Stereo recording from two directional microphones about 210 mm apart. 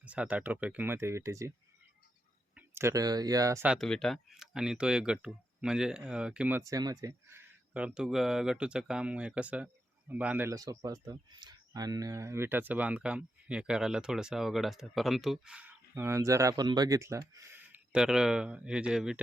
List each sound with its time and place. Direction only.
0.0 s speech: 5° right (ahead or behind)
2.6 s speech: 10° right (ahead or behind)
3.8 s speech: 5° left (ahead or behind)